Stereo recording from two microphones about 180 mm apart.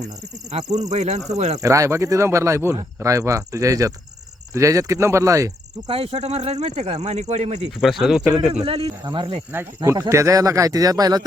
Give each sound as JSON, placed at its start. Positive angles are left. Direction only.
{"t": 0.5, "sound": "speech", "side_deg": -40}
{"t": 1.5, "sound": "speech", "side_deg": -15}
{"t": 5.9, "sound": "speech", "side_deg": -30}
{"t": 7.8, "sound": "speech", "side_deg": 0}
{"t": 8.6, "sound": "speech", "side_deg": -30}
{"t": 9.5, "sound": "speech", "side_deg": -15}